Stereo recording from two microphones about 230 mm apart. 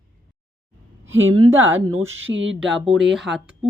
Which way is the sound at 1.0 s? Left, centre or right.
Right.